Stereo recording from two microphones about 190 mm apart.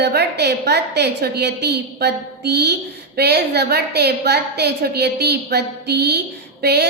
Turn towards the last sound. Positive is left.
turn(degrees=-60)  # may be behind; listen again after turning